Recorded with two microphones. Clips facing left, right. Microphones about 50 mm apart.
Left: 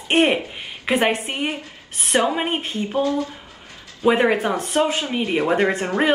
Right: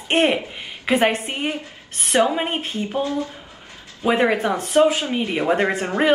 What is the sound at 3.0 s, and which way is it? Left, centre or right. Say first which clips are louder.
Speech: left 3 dB; right.